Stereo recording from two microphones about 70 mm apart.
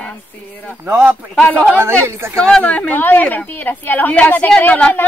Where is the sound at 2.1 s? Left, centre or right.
Right.